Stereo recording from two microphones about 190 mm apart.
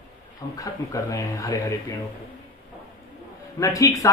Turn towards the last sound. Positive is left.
turn(degrees=15)  # may be behind; listen again after turning